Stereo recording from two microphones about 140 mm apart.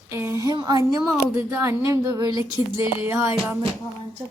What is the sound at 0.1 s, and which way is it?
A woman's voice, 20° right (ahead or behind).